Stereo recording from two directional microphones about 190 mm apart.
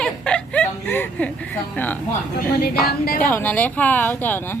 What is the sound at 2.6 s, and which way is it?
Speech, 55° left (ahead or behind).